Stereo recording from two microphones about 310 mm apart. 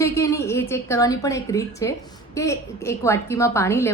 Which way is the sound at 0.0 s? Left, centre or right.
Centre.